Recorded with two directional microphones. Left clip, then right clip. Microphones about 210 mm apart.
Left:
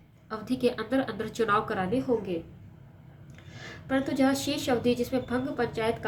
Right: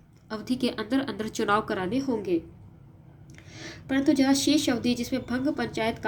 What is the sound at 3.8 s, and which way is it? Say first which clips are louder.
A woman's voice: right 3 dB; 35° right (ahead or behind).